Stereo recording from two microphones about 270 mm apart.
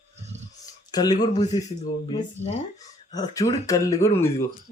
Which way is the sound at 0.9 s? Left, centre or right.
Centre.